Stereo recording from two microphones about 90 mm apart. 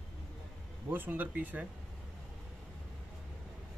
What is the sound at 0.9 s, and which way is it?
Speech, 20° right (ahead or behind).